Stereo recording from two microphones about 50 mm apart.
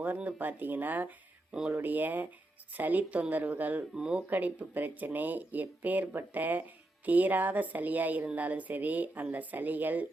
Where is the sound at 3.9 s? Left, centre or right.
Centre.